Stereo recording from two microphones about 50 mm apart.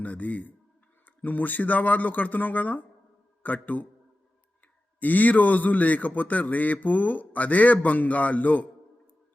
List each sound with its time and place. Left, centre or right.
0.0 s a man's voice: left
4.9 s a man's voice: left